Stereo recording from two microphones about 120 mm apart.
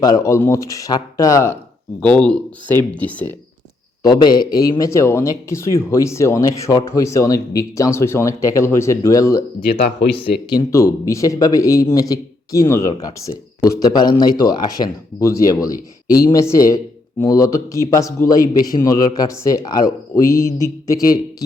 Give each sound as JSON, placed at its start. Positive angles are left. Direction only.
{"t": 0.0, "sound": "speech", "side_deg": 25}
{"t": 2.0, "sound": "speech", "side_deg": 10}
{"t": 4.0, "sound": "a man's voice", "side_deg": 35}
{"t": 10.7, "sound": "speech", "side_deg": 25}